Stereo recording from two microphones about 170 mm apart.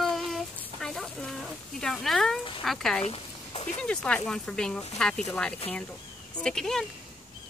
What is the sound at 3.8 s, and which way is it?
Speech, 5° left (ahead or behind).